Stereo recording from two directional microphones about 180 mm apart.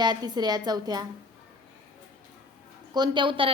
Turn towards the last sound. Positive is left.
turn(degrees=-30)  # may be behind; listen again after turning